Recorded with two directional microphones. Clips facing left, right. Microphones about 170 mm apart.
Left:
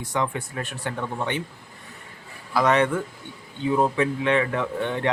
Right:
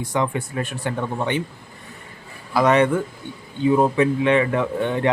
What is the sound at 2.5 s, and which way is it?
Speech, 10° right (ahead or behind).